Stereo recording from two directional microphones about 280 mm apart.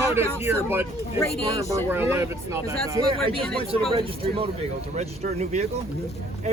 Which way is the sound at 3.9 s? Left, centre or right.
Centre.